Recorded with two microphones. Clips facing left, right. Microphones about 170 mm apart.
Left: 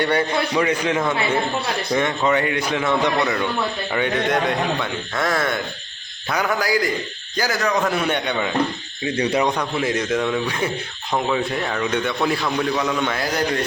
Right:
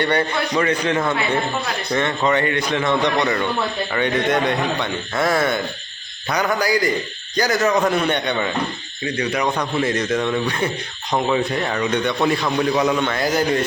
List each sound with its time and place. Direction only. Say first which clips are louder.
0.0 s a man's voice: even; 10° left (ahead or behind)
9.0 s speech: left 2 dB; 30° left (ahead or behind)
9.7 s a man's voice: right 1 dB; 10° left (ahead or behind)
12.7 s a man's voice: right 3 dB; 15° right (ahead or behind)
13.1 s a man's voice: right 3 dB; centre (ahead or behind)